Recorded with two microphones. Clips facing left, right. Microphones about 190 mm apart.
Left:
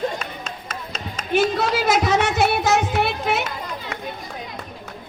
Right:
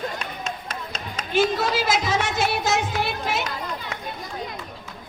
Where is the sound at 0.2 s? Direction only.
Centre (ahead or behind).